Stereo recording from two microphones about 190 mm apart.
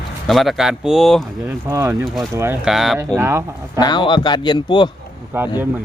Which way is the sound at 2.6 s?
Centre (ahead or behind).